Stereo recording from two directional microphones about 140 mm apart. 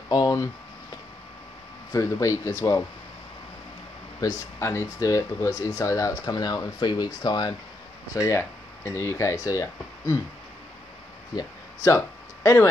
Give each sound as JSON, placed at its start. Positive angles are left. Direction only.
{"t": 0.1, "sound": "speech", "side_deg": 25}
{"t": 1.9, "sound": "speech", "side_deg": 20}
{"t": 4.2, "sound": "speech", "side_deg": 20}
{"t": 11.3, "sound": "speech", "side_deg": 20}